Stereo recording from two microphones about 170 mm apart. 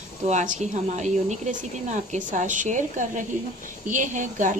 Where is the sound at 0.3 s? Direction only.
45° right (ahead or behind).